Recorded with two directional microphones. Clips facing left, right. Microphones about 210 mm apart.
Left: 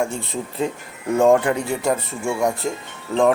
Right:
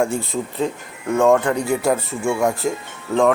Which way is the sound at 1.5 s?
15° left (ahead or behind).